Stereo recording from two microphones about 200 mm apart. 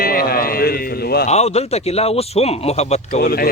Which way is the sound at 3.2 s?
50° left (ahead or behind).